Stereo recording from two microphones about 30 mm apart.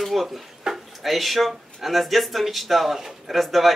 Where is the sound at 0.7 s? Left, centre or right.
Right.